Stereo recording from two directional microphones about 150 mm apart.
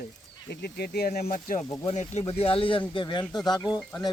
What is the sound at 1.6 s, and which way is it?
Speech, 50° left (ahead or behind).